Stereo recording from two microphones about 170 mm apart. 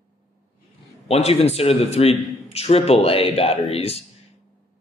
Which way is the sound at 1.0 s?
40° left (ahead or behind).